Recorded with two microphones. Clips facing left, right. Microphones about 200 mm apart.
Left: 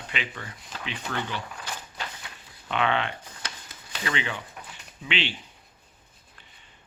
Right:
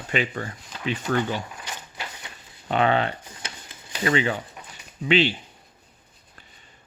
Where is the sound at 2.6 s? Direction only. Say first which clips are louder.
Right 5 dB; 40° right (ahead or behind).